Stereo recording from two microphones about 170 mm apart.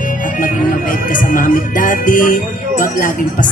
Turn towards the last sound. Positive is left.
turn(degrees=55)  # may be behind; listen again after turning